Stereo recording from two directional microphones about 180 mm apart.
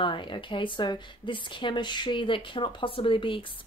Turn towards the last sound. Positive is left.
turn(degrees=30)  # may be behind; listen again after turning